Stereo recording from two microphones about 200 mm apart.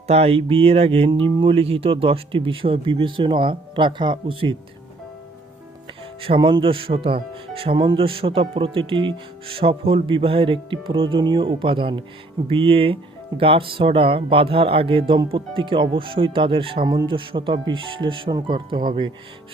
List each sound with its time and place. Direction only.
0.1 s speech: 30° right (ahead or behind)
6.2 s speech: 25° right (ahead or behind)